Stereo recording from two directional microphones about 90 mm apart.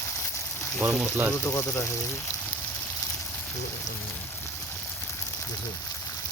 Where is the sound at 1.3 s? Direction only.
30° left (ahead or behind).